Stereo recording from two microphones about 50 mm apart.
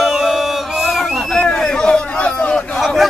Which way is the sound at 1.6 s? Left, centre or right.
Centre.